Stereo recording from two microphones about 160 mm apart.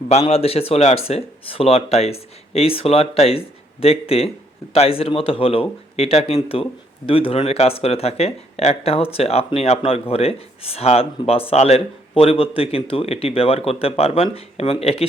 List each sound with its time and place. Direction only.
0.1 s speech: 40° left (ahead or behind)